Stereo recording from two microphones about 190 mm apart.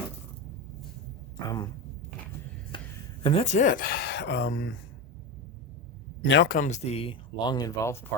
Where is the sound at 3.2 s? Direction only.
30° left (ahead or behind); by 4.7 s 70° left (ahead or behind).